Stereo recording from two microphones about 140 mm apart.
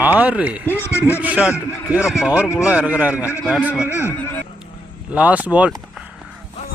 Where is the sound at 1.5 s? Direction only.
20° left (ahead or behind).